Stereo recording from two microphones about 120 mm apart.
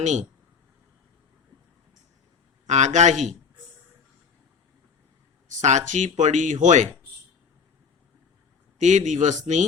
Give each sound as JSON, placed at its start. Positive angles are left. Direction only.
{"t": 0.0, "sound": "a man's voice", "side_deg": -80}
{"t": 2.6, "sound": "a man's voice", "side_deg": -80}
{"t": 5.5, "sound": "speech", "side_deg": -85}
{"t": 8.8, "sound": "speech", "side_deg": -85}